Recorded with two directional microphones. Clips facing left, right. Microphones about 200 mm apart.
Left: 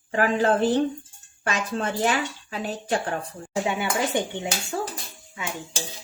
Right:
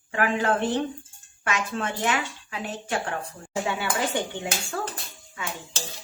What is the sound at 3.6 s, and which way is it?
Speech, 20° left (ahead or behind).